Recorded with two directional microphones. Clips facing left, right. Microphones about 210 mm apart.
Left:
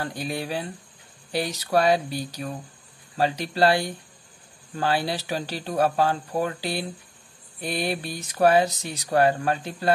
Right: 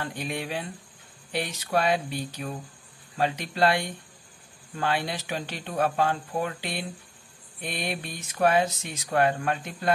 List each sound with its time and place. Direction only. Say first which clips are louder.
0.0 s speech: left 2 dB; 35° left (ahead or behind)